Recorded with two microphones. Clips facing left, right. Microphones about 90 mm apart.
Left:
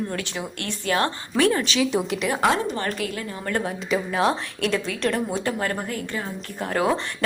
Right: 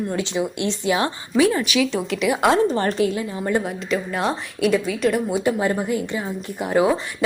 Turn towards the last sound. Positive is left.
turn(degrees=-10)  # may be behind; listen again after turning